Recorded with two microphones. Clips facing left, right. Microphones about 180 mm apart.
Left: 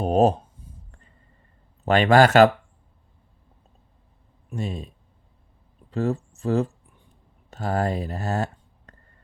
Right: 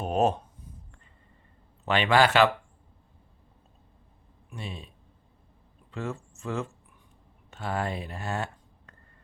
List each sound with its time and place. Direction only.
0.0 s a sound: 35° left (ahead or behind)
1.8 s a man's voice: 45° left (ahead or behind)
4.4 s speech: 45° left (ahead or behind)
5.9 s speech: 35° left (ahead or behind)
8.9 s whispering: 35° left (ahead or behind)